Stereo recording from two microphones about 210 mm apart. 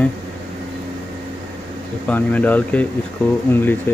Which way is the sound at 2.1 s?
10° left (ahead or behind).